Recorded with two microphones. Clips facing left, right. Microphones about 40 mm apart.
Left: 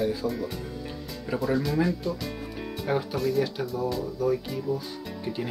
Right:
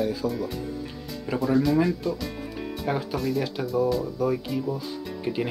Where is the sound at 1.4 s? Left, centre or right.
Centre.